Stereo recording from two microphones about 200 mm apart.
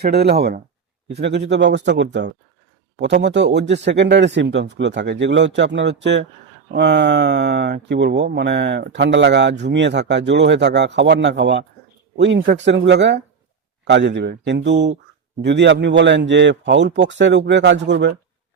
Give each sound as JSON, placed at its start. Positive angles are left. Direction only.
{"t": 0.0, "sound": "speech", "side_deg": -55}